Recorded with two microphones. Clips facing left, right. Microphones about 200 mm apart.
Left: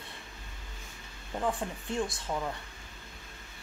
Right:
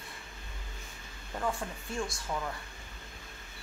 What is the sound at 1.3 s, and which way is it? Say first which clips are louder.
Speech: left 2 dB; 15° left (ahead or behind).